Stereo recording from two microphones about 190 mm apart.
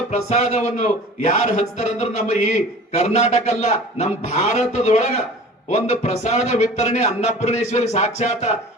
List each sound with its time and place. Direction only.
0.1 s a man's voice: 35° left (ahead or behind)